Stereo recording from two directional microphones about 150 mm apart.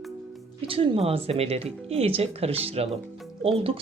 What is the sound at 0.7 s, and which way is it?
Speech, 40° right (ahead or behind).